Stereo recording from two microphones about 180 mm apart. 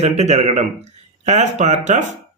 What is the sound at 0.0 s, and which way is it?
A man's voice, 40° right (ahead or behind).